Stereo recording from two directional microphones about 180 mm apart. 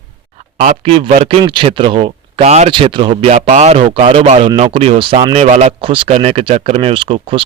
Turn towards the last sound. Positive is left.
turn(degrees=-30)  # may be behind; listen again after turning